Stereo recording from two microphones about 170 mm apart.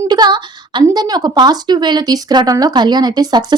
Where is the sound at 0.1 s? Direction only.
25° right (ahead or behind).